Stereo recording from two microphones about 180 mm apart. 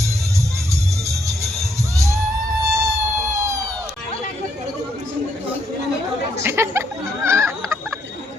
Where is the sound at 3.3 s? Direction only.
15° right (ahead or behind).